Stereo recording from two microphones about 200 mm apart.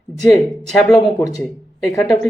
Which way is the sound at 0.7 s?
Centre (ahead or behind).